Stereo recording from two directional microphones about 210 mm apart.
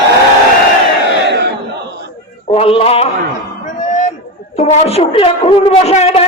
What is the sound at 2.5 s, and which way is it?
Speech, 30° left (ahead or behind).